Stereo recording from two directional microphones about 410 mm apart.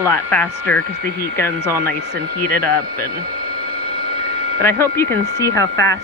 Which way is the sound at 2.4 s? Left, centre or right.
Right.